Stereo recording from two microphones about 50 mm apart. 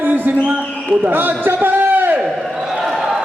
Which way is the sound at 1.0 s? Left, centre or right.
Right.